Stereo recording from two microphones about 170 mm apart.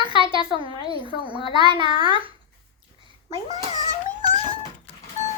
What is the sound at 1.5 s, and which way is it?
Speech, 30° right (ahead or behind).